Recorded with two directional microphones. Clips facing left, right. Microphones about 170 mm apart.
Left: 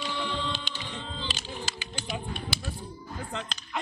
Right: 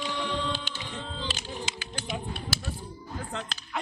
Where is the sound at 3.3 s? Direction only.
5° right (ahead or behind).